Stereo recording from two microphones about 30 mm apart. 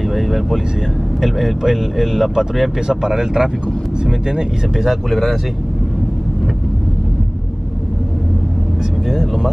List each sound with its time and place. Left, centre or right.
0.1 s a sound: centre
1.2 s speech: centre
2.9 s speech: centre
4.7 s speech: centre
9.1 s speech: centre